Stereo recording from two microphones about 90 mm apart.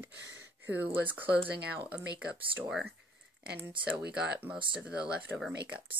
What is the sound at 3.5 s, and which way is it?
Speech, 20° right (ahead or behind).